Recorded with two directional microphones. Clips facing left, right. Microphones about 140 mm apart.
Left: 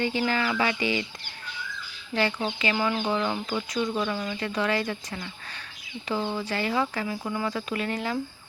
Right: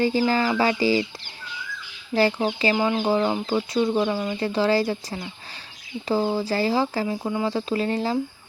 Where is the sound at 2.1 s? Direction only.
35° right (ahead or behind).